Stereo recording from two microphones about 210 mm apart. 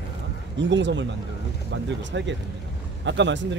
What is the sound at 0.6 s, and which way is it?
Speech, 60° right (ahead or behind).